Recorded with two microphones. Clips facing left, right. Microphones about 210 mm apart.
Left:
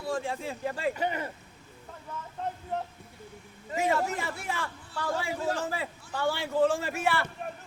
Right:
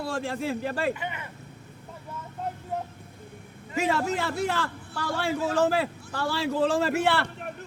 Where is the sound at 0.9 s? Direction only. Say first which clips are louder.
Left 5 dB; 40° left (ahead or behind).